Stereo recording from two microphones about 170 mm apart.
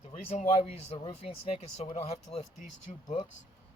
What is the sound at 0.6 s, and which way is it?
Speech, 35° left (ahead or behind).